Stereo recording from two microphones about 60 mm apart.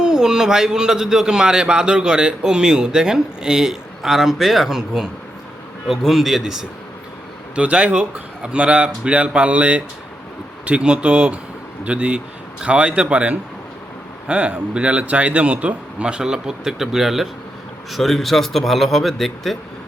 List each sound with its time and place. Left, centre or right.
0.0 s a man's voice: centre
7.5 s speech: right; by 19.5 s centre